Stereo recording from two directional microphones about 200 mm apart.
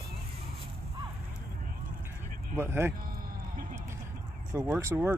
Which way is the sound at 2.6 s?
10° right (ahead or behind).